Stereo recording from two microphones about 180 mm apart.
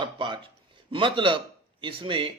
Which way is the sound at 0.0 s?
25° right (ahead or behind).